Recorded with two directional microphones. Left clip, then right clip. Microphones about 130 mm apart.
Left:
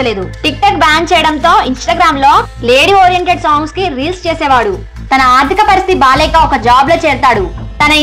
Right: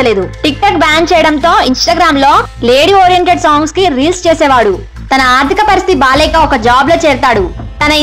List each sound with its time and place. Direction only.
0.0 s a woman's voice: 35° right (ahead or behind)
0.7 s speech: 40° right (ahead or behind)